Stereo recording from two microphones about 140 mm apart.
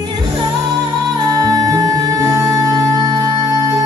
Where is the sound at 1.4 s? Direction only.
25° right (ahead or behind).